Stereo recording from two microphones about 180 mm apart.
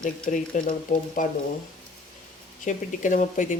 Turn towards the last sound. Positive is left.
turn(degrees=45)  # may be behind; listen again after turning